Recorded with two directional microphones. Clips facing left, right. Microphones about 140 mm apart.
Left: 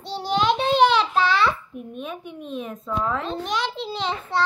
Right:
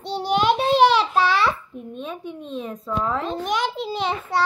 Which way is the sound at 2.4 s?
5° left (ahead or behind).